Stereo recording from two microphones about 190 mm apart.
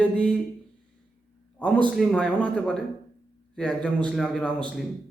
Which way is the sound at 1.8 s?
Centre (ahead or behind).